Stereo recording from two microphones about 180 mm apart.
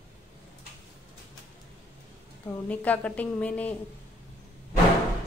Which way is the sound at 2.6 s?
10° left (ahead or behind).